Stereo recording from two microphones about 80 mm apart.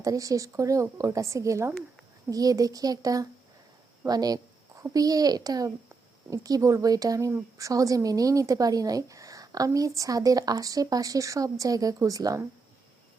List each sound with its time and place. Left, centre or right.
0.0 s a woman's voice: right
4.0 s a sound: right
4.8 s a woman's voice: right